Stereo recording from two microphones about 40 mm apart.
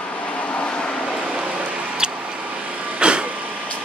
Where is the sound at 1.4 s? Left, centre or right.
Right.